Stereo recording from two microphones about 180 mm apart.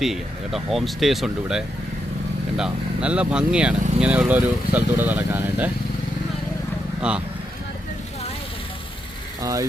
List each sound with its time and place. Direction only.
0.0 s speech: centre (ahead or behind)
7.1 s speech: 5° right (ahead or behind)
9.4 s speech: 20° right (ahead or behind)